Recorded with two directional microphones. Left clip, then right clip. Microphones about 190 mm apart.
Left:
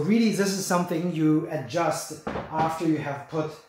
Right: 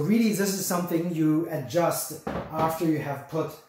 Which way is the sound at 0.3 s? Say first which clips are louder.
Left 2 dB; 35° left (ahead or behind).